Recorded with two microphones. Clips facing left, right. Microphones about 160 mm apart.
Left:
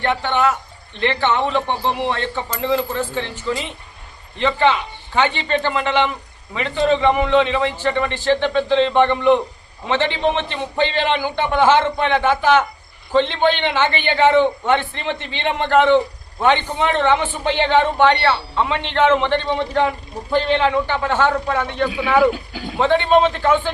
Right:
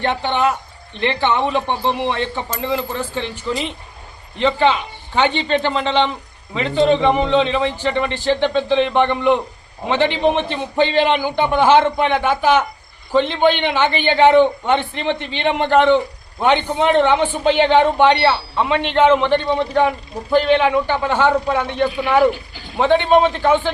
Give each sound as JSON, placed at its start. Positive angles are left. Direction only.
{"t": 0.0, "sound": "a man's voice", "side_deg": -20}